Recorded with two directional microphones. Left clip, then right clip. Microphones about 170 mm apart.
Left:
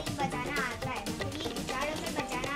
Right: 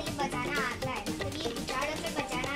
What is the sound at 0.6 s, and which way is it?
Music, centre (ahead or behind).